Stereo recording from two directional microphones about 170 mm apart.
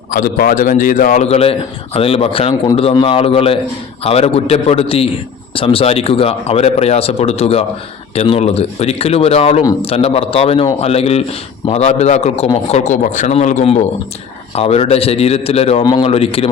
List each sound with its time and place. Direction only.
0.1 s a man's voice: 55° left (ahead or behind); by 15.8 s 35° left (ahead or behind)
15.8 s a man's voice: 25° left (ahead or behind)
16.0 s speech: 35° left (ahead or behind)